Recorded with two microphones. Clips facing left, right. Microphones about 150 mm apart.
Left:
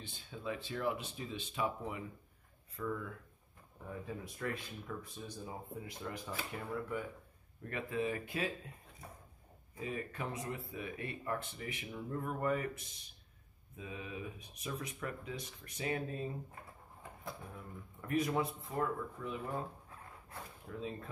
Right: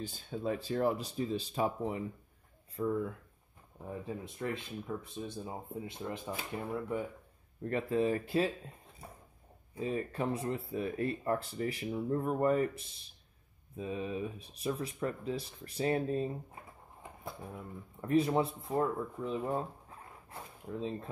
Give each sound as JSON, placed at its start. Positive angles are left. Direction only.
{"t": 0.0, "sound": "speech", "side_deg": -40}
{"t": 9.8, "sound": "speech", "side_deg": -30}
{"t": 17.0, "sound": "speech", "side_deg": -25}